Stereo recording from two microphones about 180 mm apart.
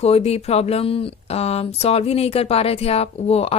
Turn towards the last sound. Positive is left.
turn(degrees=35)  # may be behind; listen again after turning